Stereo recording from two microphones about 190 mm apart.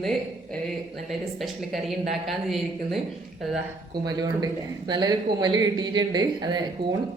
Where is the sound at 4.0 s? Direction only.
20° right (ahead or behind).